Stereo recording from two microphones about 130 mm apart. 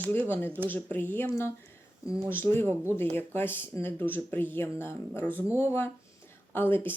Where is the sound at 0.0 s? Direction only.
15° left (ahead or behind).